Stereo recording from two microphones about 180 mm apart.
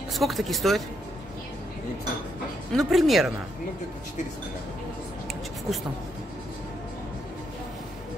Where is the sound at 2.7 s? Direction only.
Centre (ahead or behind).